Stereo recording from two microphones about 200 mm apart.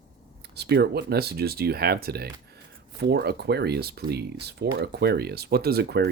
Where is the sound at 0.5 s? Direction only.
55° right (ahead or behind).